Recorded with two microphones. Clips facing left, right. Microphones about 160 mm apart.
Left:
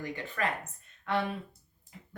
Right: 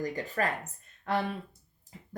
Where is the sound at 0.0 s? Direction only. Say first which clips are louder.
Right 3 dB; 40° right (ahead or behind).